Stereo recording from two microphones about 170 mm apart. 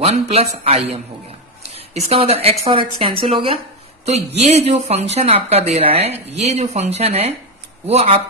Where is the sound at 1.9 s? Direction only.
35° right (ahead or behind).